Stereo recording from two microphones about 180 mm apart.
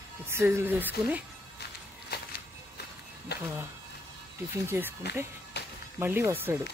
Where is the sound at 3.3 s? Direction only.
65° left (ahead or behind).